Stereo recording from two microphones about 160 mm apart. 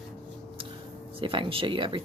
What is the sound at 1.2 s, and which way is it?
Speech, 30° right (ahead or behind).